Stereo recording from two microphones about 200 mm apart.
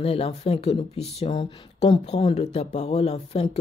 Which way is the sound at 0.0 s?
30° left (ahead or behind).